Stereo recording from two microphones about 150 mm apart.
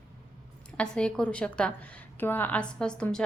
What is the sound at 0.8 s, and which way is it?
A woman's voice, 5° left (ahead or behind).